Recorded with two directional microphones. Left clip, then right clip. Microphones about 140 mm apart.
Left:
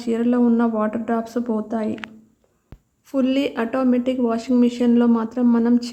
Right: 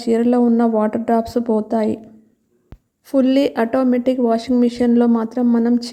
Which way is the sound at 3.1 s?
30° right (ahead or behind).